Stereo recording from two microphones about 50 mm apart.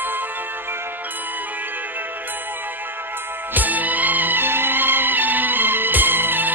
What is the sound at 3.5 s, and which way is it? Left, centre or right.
Music, right.